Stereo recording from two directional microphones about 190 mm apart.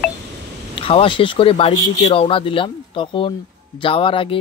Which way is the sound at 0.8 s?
30° left (ahead or behind).